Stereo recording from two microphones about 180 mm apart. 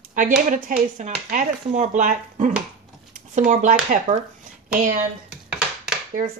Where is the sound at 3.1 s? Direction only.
40° right (ahead or behind).